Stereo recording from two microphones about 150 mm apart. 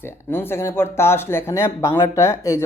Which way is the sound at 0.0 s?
15° left (ahead or behind).